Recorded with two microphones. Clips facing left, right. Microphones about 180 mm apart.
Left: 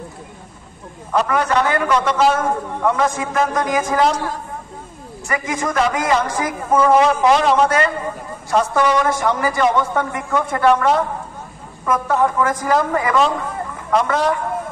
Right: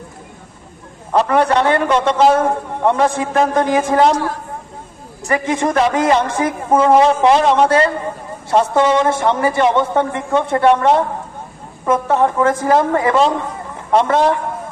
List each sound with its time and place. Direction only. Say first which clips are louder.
1.1 s a man's voice: right 4 dB; 30° right (ahead or behind)
5.3 s a man's voice: right 5 dB; 30° right (ahead or behind)